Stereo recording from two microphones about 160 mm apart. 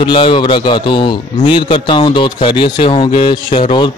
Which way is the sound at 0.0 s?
30° left (ahead or behind).